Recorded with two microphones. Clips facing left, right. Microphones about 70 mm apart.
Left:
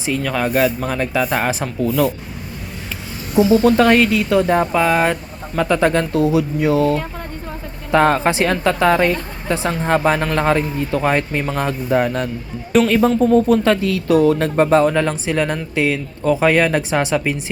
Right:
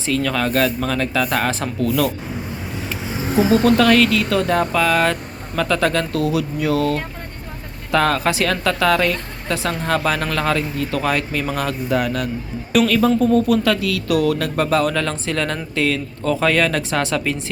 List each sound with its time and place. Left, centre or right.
0.0 s speech: centre
3.5 s speech: right
3.8 s speech: left